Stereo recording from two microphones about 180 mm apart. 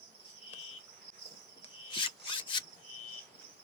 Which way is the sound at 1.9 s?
30° left (ahead or behind).